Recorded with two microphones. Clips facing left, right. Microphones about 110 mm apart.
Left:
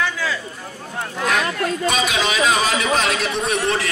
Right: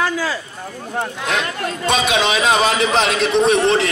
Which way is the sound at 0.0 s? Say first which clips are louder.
Right 3 dB; 35° right (ahead or behind).